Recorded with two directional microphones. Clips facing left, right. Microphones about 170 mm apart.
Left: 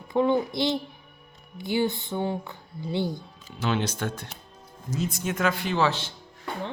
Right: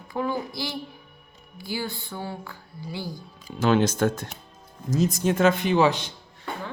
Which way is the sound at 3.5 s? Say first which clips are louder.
Right 7 dB; 45° right (ahead or behind).